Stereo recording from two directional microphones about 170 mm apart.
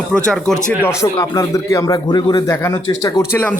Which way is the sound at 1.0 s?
20° left (ahead or behind).